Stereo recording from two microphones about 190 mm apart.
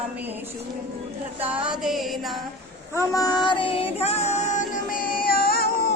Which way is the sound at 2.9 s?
15° left (ahead or behind).